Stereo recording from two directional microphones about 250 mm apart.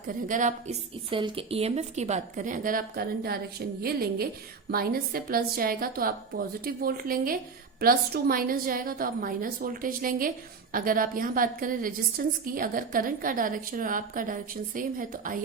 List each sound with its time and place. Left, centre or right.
0.3 s a woman's voice: right